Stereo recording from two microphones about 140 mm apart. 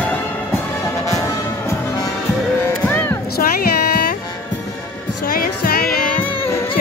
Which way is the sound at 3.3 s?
90° left.